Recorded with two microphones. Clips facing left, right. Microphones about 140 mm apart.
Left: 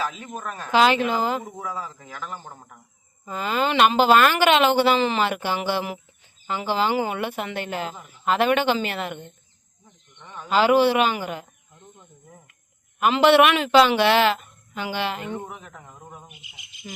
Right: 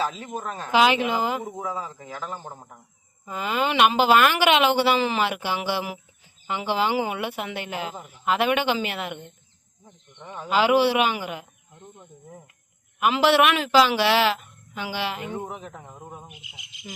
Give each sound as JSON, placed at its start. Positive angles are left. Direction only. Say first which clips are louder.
{"t": 0.0, "sound": "a woman's voice", "louder": "right 2 dB", "side_deg": -30}
{"t": 0.7, "sound": "a woman's voice", "louder": "left 1 dB", "side_deg": -10}
{"t": 9.8, "sound": "a sound", "louder": "right 5 dB", "side_deg": -15}
{"t": 10.5, "sound": "a woman's voice", "louder": "left 2 dB", "side_deg": -10}
{"t": 13.0, "sound": "a woman's voice", "louder": "left 3 dB", "side_deg": -5}
{"t": 15.4, "sound": "speech", "louder": "right 3 dB", "side_deg": -30}